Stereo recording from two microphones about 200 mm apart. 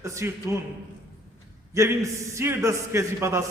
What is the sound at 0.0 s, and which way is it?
Speech, 15° right (ahead or behind).